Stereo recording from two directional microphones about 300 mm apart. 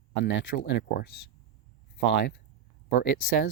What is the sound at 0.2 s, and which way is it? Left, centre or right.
Speech, left.